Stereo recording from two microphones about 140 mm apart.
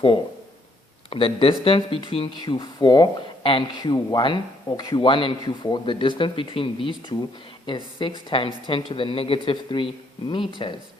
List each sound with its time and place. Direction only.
1.1 s speech: 40° left (ahead or behind)